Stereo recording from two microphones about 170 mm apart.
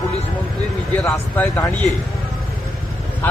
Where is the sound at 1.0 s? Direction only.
10° left (ahead or behind).